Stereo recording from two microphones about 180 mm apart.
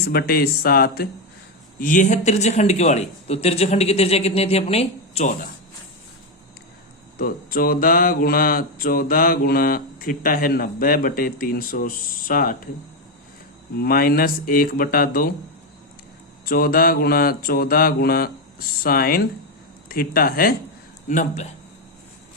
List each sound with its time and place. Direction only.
0.1 s mantra: 55° left (ahead or behind)
1.8 s speech: 45° left (ahead or behind)
7.2 s speech: 55° left (ahead or behind)
13.7 s speech: 55° left (ahead or behind)
16.5 s mantra: 55° left (ahead or behind)
21.1 s speech: 45° left (ahead or behind)